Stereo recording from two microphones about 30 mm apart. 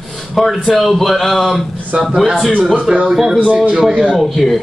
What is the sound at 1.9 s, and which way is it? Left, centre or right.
Speech, right.